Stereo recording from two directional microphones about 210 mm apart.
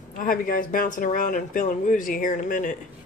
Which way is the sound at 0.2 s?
40° left (ahead or behind).